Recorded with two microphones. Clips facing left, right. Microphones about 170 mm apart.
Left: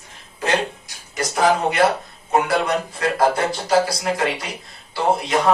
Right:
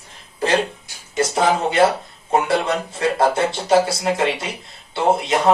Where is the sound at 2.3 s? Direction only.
25° right (ahead or behind).